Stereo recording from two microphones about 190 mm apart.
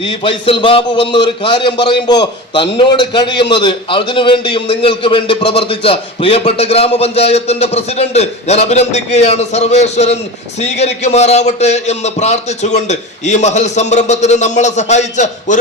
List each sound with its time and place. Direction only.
0.0 s a man's voice: 30° left (ahead or behind)